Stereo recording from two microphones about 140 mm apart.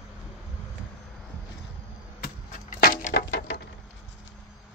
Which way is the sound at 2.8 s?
90° left.